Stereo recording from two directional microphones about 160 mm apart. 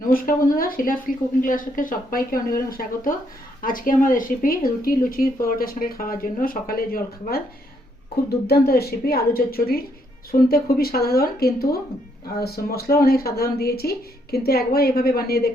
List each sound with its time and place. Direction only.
0.1 s speech: 60° left (ahead or behind)